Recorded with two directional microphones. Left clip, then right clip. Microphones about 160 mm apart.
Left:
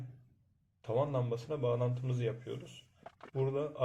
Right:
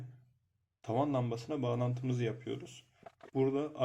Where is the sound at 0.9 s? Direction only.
90° right.